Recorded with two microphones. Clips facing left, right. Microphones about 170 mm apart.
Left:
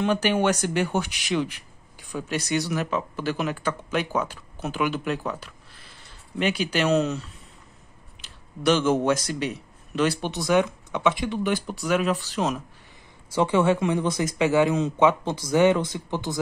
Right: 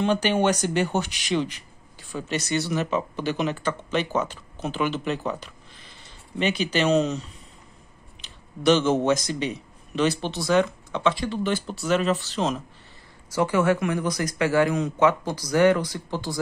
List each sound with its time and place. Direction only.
0.0 s a man's voice: 5° left (ahead or behind)
8.6 s a man's voice: 5° left (ahead or behind)
13.3 s speech: 25° left (ahead or behind)